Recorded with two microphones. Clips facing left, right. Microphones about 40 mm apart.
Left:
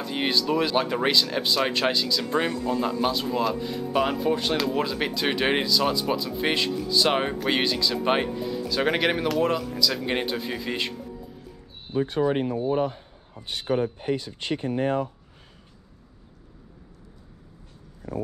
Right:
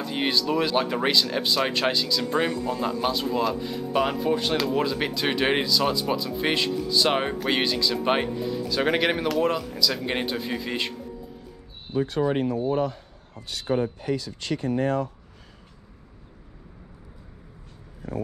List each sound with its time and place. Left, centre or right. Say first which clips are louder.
0.0 s speech: even; centre
12.8 s a sound: even; left
13.7 s speech: even; centre
13.9 s speech: even; left